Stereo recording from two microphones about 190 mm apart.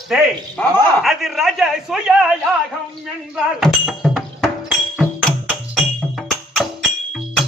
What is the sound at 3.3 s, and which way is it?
Music, centre (ahead or behind).